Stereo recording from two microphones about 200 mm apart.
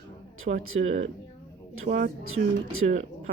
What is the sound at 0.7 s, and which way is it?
Speech, 80° right.